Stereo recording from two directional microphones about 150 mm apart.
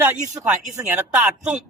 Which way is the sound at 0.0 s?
10° right (ahead or behind).